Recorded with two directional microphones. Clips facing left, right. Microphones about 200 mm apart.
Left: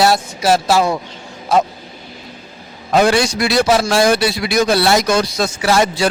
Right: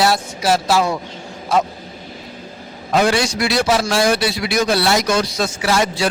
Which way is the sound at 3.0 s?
45° left (ahead or behind).